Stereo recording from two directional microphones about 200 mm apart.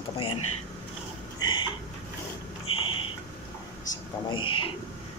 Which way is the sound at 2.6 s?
25° left (ahead or behind).